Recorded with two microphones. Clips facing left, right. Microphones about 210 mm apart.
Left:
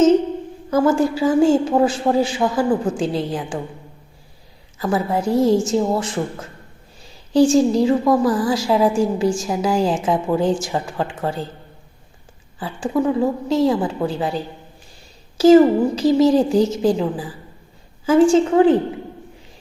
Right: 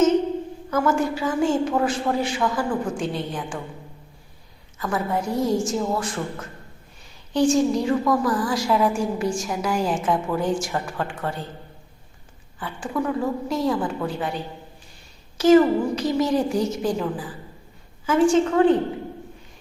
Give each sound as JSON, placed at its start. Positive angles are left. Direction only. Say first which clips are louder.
{"t": 0.7, "sound": "a woman's voice", "louder": "left 5 dB", "side_deg": 30}
{"t": 4.8, "sound": "a woman's voice", "louder": "left 5 dB", "side_deg": 30}
{"t": 7.3, "sound": "a woman's voice", "louder": "left 5 dB", "side_deg": 30}
{"t": 12.5, "sound": "a woman's voice", "louder": "left 6 dB", "side_deg": 30}
{"t": 15.4, "sound": "a woman's voice", "louder": "left 5 dB", "side_deg": 30}